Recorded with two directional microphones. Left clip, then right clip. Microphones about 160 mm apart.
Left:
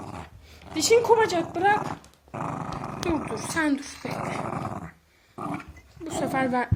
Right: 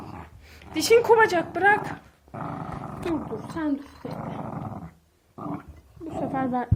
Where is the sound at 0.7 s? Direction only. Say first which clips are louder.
Right 2 dB; 5° left (ahead or behind).